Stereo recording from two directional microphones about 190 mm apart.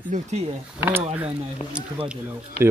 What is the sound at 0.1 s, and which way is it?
Speech, 35° right (ahead or behind).